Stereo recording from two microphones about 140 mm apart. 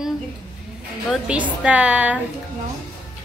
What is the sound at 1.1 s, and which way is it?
A woman's voice, 5° right (ahead or behind).